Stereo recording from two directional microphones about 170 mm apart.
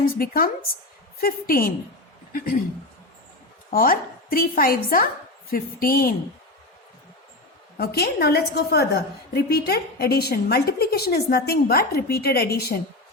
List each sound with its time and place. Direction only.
0.0 s a woman's voice: 60° left (ahead or behind)
3.7 s a woman's voice: 60° left (ahead or behind)
7.8 s a woman's voice: 70° left (ahead or behind)